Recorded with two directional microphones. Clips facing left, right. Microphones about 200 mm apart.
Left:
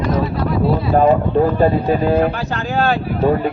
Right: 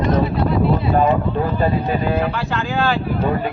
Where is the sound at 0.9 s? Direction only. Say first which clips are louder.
Left 4 dB; 40° left (ahead or behind).